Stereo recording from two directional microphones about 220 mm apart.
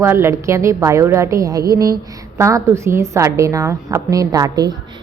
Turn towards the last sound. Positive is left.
turn(degrees=-15)  # may be behind; listen again after turning